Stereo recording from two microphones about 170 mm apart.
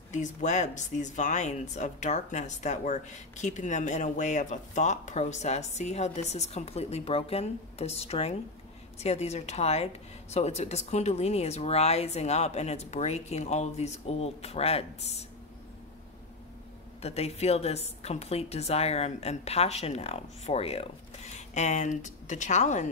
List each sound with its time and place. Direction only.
0.1 s speech: 45° left (ahead or behind)
17.0 s speech: 40° left (ahead or behind)